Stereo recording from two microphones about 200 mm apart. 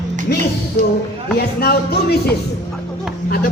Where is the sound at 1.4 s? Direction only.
50° left (ahead or behind).